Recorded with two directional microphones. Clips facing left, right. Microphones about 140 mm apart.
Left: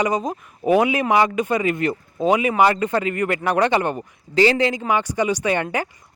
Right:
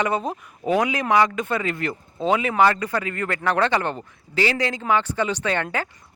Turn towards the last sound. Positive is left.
turn(degrees=15)  # may be behind; listen again after turning